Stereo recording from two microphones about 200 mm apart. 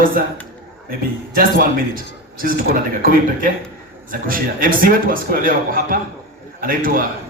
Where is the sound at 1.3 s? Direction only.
45° right (ahead or behind).